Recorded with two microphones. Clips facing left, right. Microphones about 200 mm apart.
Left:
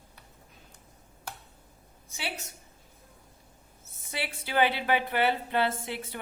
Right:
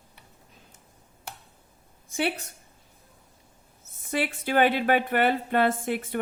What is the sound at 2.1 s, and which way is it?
Speech, 55° right (ahead or behind).